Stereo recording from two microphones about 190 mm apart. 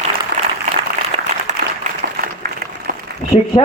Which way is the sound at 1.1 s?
30° right (ahead or behind).